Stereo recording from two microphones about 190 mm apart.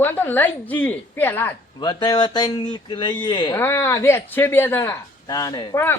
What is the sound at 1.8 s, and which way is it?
Speech, 20° left (ahead or behind).